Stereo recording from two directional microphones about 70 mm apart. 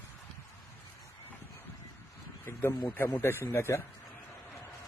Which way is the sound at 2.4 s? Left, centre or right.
Left.